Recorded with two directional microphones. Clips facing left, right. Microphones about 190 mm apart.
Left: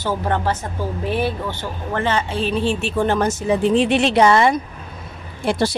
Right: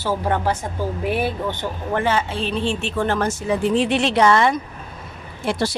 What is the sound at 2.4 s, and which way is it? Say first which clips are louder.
Speech: left 3 dB; 5° left (ahead or behind).